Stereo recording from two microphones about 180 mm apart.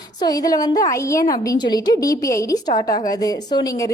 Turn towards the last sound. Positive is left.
turn(degrees=20)  # may be behind; listen again after turning